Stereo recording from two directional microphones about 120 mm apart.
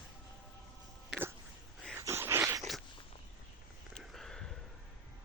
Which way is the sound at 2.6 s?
Centre (ahead or behind).